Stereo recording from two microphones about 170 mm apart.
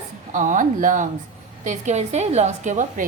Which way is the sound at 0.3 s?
50° right (ahead or behind).